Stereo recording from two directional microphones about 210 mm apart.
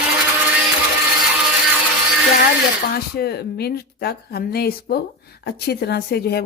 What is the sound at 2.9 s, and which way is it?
Speech, 50° left (ahead or behind).